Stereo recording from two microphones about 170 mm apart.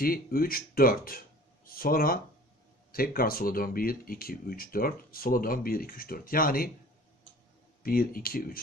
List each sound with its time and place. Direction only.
0.0 s speech: 60° left (ahead or behind)
7.8 s speech: 60° left (ahead or behind)